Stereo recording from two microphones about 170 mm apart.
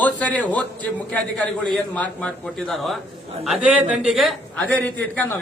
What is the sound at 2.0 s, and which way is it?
A man's voice, 5° left (ahead or behind).